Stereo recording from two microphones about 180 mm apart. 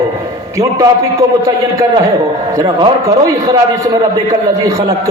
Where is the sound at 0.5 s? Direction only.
15° right (ahead or behind).